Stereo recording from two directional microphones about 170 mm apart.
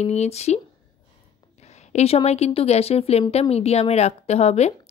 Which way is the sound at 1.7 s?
40° left (ahead or behind).